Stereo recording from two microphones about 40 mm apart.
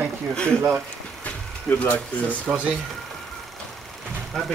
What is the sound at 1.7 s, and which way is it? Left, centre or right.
Speech, left.